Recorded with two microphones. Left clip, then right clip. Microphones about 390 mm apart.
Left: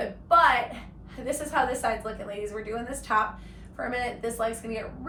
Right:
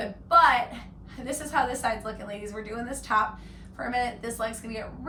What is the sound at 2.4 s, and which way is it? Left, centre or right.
A woman's voice, centre.